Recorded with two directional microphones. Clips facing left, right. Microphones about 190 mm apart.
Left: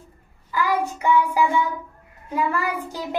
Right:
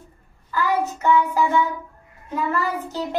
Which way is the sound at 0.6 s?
10° left (ahead or behind).